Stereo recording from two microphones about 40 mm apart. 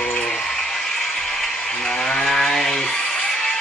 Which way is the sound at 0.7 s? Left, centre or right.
Centre.